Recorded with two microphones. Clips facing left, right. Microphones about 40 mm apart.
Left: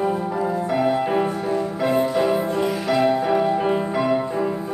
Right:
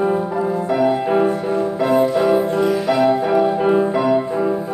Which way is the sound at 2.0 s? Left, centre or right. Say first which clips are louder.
Right 4 dB; centre.